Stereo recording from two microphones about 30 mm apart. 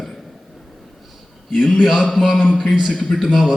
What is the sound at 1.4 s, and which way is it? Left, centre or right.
Speech, centre.